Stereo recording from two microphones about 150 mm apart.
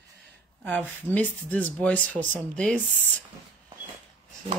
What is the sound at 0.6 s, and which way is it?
Speech, 10° left (ahead or behind).